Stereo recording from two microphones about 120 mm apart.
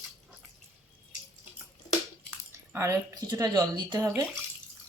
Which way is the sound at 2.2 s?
20° right (ahead or behind).